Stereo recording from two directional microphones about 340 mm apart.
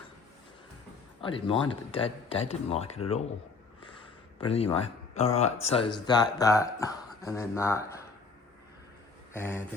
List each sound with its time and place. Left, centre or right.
1.2 s speech: centre
3.8 s a sound: centre
5.6 s speech: centre
9.3 s speech: centre